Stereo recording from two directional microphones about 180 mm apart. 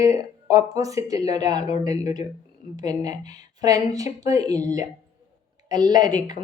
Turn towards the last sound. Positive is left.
turn(degrees=-25)  # may be behind; listen again after turning